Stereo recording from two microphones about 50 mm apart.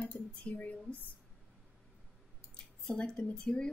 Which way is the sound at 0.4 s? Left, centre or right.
Left.